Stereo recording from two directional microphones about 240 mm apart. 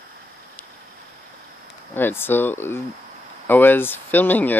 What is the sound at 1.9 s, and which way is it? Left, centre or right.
Speech, centre.